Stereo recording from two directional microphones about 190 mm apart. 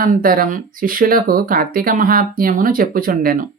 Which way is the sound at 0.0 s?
45° right (ahead or behind).